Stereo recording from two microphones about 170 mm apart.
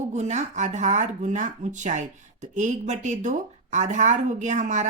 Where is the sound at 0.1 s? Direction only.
45° right (ahead or behind).